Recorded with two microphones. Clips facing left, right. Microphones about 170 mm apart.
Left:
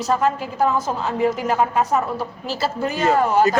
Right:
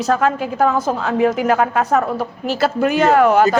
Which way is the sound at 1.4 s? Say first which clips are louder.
Right 3 dB; 80° right.